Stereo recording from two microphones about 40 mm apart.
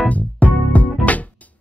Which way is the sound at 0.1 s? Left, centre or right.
Left.